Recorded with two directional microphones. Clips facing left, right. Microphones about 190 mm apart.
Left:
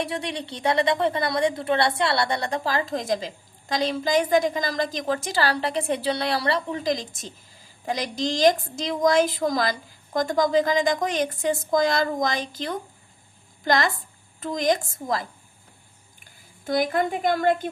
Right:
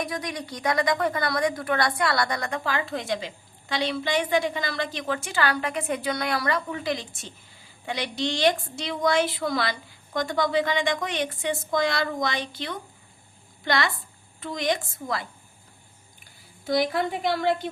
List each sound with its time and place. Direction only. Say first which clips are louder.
0.0 s a woman's voice: left 2 dB; 30° left (ahead or behind)
16.6 s a woman's voice: left 1 dB; 45° left (ahead or behind)